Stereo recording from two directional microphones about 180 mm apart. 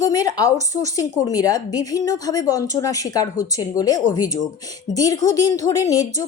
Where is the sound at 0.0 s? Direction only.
20° left (ahead or behind).